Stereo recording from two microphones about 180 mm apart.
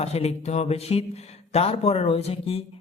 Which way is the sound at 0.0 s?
35° left (ahead or behind).